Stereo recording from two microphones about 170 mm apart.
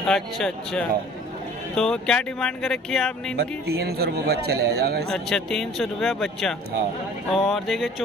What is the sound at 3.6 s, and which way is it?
A man's voice, 70° right (ahead or behind).